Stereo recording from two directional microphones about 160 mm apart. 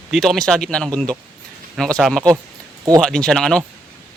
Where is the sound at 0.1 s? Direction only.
Centre (ahead or behind).